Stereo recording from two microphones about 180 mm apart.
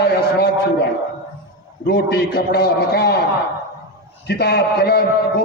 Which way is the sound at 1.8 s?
60° left (ahead or behind).